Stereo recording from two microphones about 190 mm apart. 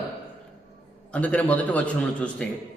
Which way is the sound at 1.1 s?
5° left (ahead or behind).